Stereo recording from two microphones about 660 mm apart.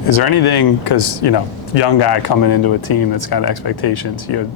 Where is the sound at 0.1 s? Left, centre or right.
Left.